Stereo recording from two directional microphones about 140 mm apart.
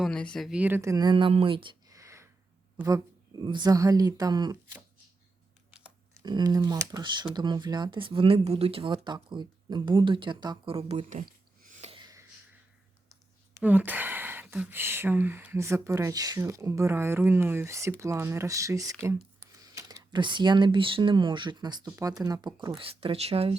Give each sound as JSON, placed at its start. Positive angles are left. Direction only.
{"t": 0.0, "sound": "speech", "side_deg": 5}
{"t": 0.8, "sound": "speech", "side_deg": -25}
{"t": 1.9, "sound": "a sound", "side_deg": -20}
{"t": 2.8, "sound": "speech", "side_deg": -25}
{"t": 5.7, "sound": "a sound", "side_deg": -5}
{"t": 6.2, "sound": "speech", "side_deg": -30}
{"t": 10.8, "sound": "a sound", "side_deg": -50}
{"t": 13.1, "sound": "speech", "side_deg": -15}
{"t": 22.8, "sound": "speech", "side_deg": -40}